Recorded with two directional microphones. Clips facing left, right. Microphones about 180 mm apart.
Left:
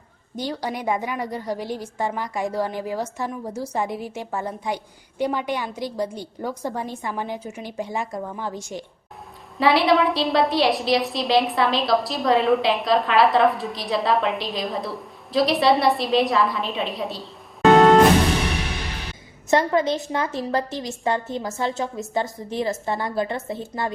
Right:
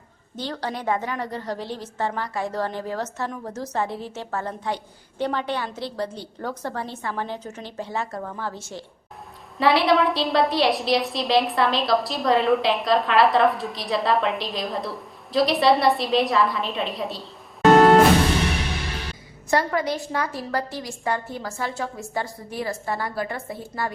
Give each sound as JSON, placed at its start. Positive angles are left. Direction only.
{"t": 0.3, "sound": "a woman's voice", "side_deg": 10}
{"t": 9.6, "sound": "a woman's voice", "side_deg": 0}
{"t": 19.5, "sound": "a woman's voice", "side_deg": 20}